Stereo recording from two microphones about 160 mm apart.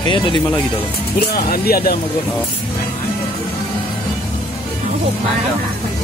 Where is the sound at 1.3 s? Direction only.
70° left (ahead or behind).